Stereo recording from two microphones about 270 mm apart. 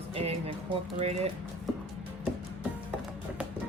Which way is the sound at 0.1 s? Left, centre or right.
Right.